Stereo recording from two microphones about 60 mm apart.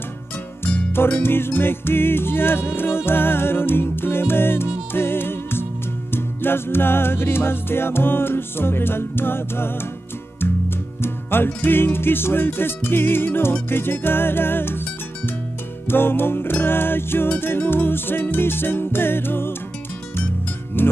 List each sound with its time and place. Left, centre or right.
0.9 s music: left
11.0 s music: left
15.9 s music: left
20.7 s music: left